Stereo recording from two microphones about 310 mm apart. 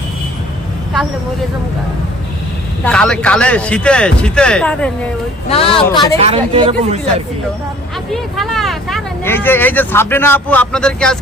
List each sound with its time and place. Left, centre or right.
2.8 s speech: centre
5.5 s speech: centre
6.1 s speech: centre
8.1 s speech: centre